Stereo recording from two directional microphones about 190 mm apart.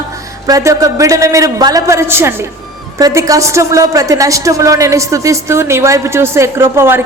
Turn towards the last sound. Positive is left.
turn(degrees=-10)  # may be behind; listen again after turning